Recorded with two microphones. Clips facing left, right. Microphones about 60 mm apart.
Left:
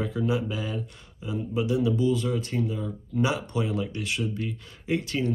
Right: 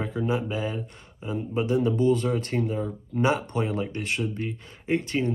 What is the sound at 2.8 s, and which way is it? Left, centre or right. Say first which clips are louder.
Speech: right 1 dB; right.